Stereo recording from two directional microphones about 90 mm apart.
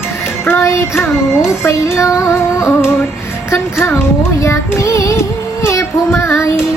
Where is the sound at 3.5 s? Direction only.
25° left (ahead or behind).